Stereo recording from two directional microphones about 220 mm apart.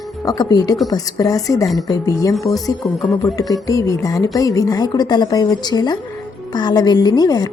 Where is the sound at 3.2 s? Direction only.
15° left (ahead or behind).